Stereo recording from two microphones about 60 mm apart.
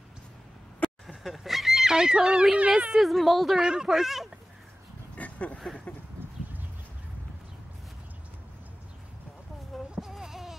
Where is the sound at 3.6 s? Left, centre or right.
Centre.